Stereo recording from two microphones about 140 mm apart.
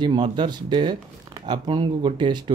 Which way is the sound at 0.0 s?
35° right (ahead or behind).